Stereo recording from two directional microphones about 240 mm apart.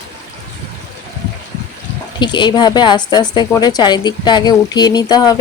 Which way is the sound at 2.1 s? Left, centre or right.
Centre.